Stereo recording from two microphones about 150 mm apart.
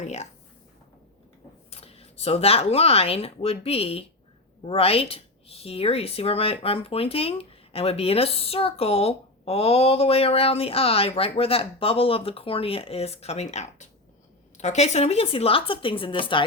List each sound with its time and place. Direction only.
0.0 s speech: 50° left (ahead or behind)
1.7 s a woman's voice: 40° left (ahead or behind)